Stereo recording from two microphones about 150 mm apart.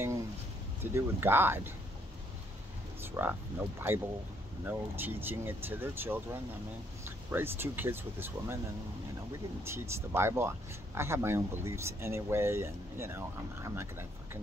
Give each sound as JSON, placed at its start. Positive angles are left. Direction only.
{"t": 0.9, "sound": "speech", "side_deg": -15}
{"t": 3.0, "sound": "speech", "side_deg": -15}
{"t": 9.6, "sound": "speech", "side_deg": -15}